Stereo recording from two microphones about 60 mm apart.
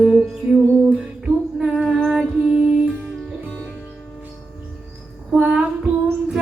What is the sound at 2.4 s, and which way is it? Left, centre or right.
Music, centre.